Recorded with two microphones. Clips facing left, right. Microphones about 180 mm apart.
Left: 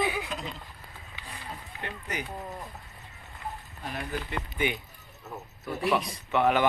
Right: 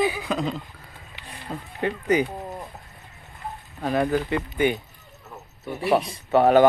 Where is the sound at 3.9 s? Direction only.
90° right.